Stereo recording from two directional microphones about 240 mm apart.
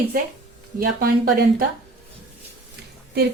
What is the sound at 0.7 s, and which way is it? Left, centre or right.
Speech, right.